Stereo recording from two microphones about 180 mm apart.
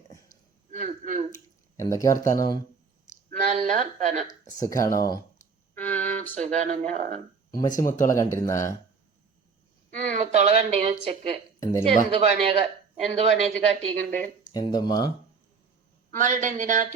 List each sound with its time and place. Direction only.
0.7 s speech: 40° right (ahead or behind)
1.7 s speech: 15° left (ahead or behind)
3.2 s speech: 40° right (ahead or behind)
4.3 s speech: 20° left (ahead or behind)
5.7 s a sound: 10° left (ahead or behind)
6.4 s a woman's voice: 40° right (ahead or behind)
7.8 s speech: 15° left (ahead or behind)
9.9 s a woman's voice: 45° right (ahead or behind)
11.6 s speech: 15° left (ahead or behind)
12.1 s a woman's voice: 35° right (ahead or behind)
13.9 s speech: 10° left (ahead or behind)
14.5 s speech: 20° left (ahead or behind)
16.1 s speech: 45° right (ahead or behind)